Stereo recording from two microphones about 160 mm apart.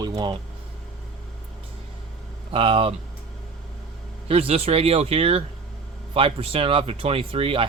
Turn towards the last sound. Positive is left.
turn(degrees=-35)  # may be behind; listen again after turning